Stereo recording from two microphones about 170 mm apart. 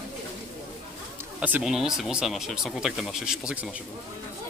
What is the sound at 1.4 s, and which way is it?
Speech, 5° right (ahead or behind).